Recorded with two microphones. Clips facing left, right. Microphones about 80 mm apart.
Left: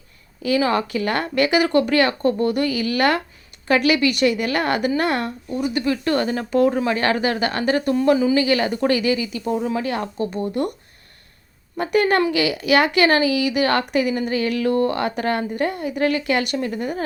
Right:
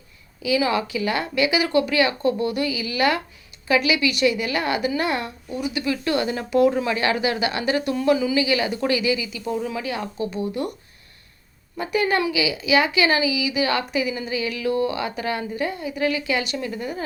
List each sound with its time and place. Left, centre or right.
0.4 s a woman's voice: left
9.5 s speech: left
9.8 s a woman's voice: left
11.8 s a woman's voice: left